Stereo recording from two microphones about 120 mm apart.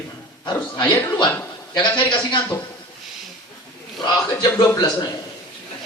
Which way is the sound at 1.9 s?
40° left (ahead or behind).